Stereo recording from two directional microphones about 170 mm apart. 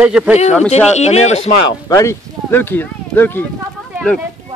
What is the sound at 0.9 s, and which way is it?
Speech, 40° left (ahead or behind).